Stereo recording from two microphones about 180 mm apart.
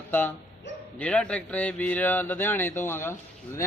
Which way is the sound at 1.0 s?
5° left (ahead or behind).